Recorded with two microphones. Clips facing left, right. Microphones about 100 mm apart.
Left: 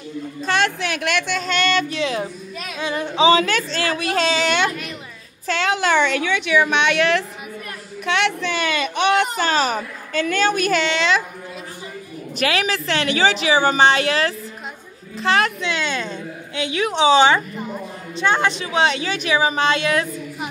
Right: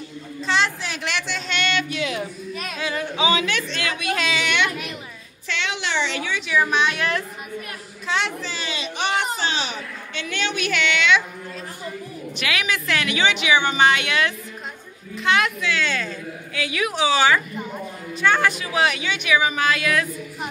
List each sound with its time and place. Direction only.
0.4 s speech: 55° left (ahead or behind); by 2.2 s 35° left (ahead or behind)
2.8 s a woman's voice: 20° left (ahead or behind)
12.4 s speech: 35° left (ahead or behind)
15.6 s a woman's voice: 20° left (ahead or behind)